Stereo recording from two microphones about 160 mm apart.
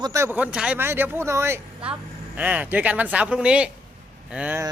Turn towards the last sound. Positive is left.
turn(degrees=-5)  # may be behind; listen again after turning